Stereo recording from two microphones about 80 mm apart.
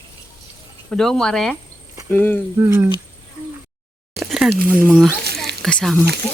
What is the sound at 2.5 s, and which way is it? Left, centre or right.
Speech, right.